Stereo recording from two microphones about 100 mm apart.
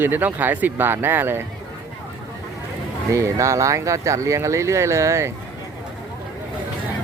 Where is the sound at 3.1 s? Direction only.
30° right (ahead or behind).